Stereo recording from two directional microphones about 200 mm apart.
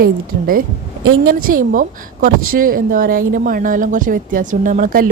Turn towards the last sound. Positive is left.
turn(degrees=-45)  # may be behind; listen again after turning